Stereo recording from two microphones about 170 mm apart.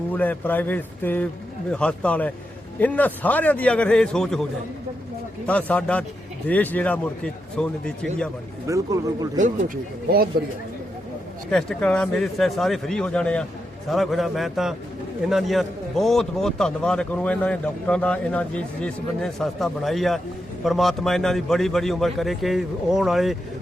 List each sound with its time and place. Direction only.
0.1 s a man's voice: 10° left (ahead or behind)
5.5 s a man's voice: 10° left (ahead or behind)
8.6 s speech: 20° right (ahead or behind)
9.4 s speech: 55° right (ahead or behind)
11.5 s a man's voice: 5° left (ahead or behind)